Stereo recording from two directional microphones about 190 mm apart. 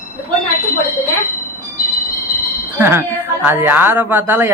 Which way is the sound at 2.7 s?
10° right (ahead or behind).